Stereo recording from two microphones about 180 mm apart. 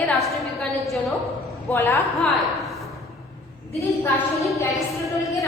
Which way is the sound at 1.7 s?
15° left (ahead or behind).